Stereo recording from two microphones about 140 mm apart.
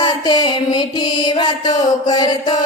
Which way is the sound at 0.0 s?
30° left (ahead or behind).